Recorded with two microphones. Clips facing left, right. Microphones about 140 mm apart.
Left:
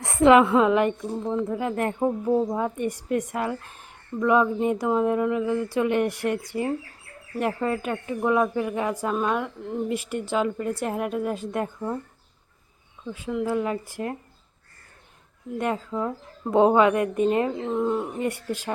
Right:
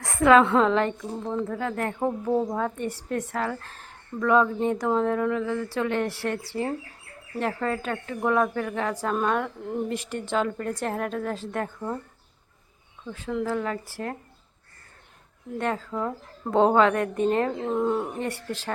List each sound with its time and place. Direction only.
0.0 s a sound: 20° left (ahead or behind)
0.4 s a woman's voice: 5° left (ahead or behind)
2.2 s speech: centre (ahead or behind)
2.6 s a woman's voice: 10° left (ahead or behind)
13.1 s a woman's voice: 10° left (ahead or behind)
15.5 s a woman's voice: 10° left (ahead or behind)
17.5 s speech: centre (ahead or behind)
18.2 s a woman's voice: 10° left (ahead or behind)